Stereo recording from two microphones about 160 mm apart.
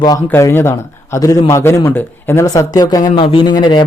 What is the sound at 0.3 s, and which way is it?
A man's voice, 15° left (ahead or behind).